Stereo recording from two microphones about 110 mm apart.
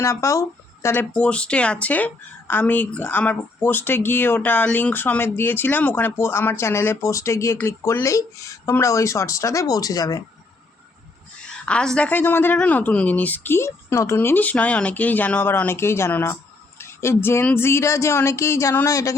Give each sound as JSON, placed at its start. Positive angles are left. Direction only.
{"t": 0.0, "sound": "speech", "side_deg": 25}
{"t": 1.1, "sound": "a woman's voice", "side_deg": 10}
{"t": 11.4, "sound": "a woman's voice", "side_deg": 10}